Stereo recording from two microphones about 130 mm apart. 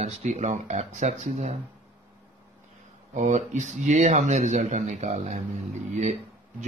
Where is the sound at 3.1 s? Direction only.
65° right (ahead or behind).